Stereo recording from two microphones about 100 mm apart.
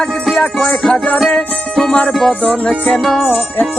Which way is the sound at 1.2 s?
5° left (ahead or behind).